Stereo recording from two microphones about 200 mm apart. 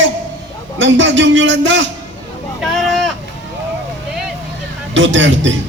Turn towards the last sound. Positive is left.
turn(degrees=-65)  # may be behind; listen again after turning